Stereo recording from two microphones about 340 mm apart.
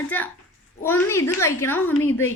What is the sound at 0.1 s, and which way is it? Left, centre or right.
A child's voice, centre.